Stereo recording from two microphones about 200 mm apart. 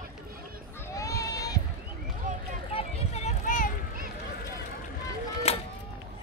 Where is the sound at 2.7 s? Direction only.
35° left (ahead or behind).